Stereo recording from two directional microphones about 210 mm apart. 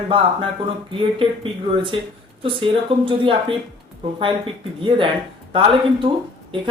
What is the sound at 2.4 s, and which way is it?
Speech, 25° right (ahead or behind).